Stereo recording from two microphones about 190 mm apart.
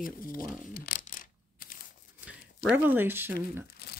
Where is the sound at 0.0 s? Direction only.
50° left (ahead or behind).